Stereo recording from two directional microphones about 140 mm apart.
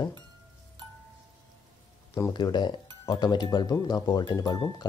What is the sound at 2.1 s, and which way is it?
Speech, 25° left (ahead or behind).